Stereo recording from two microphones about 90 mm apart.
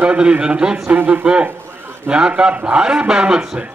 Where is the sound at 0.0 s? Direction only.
15° right (ahead or behind).